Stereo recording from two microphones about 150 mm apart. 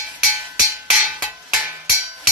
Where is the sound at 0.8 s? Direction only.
5° right (ahead or behind).